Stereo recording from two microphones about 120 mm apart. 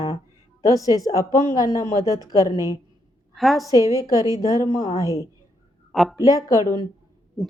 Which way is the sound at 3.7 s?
30° right (ahead or behind).